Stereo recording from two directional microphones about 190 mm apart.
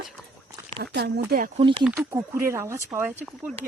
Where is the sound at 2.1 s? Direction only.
15° right (ahead or behind).